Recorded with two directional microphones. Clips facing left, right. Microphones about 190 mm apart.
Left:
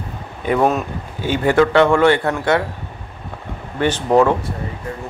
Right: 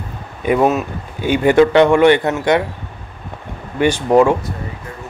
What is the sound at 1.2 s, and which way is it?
Speech, 15° right (ahead or behind).